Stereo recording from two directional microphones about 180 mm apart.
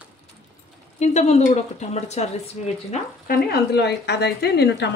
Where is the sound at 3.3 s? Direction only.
65° left (ahead or behind).